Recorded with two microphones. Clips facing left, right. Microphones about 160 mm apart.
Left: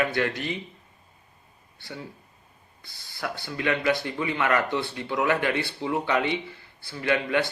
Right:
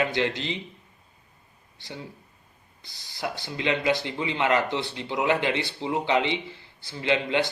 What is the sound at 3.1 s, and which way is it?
Speech, 20° right (ahead or behind).